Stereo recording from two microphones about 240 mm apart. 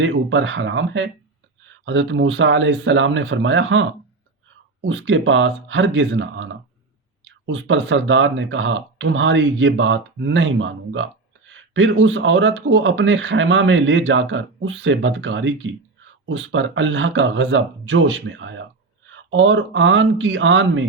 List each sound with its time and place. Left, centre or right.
0.0 s speech: right